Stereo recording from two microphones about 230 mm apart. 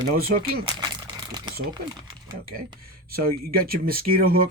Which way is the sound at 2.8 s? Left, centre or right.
Right.